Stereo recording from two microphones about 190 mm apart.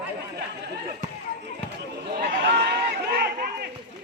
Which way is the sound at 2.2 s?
60° right (ahead or behind).